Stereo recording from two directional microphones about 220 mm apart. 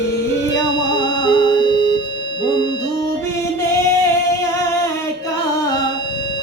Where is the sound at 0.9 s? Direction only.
20° left (ahead or behind).